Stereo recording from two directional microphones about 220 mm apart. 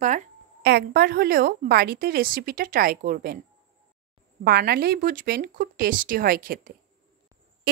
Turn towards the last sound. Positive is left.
turn(degrees=-40)  # may be behind; listen again after turning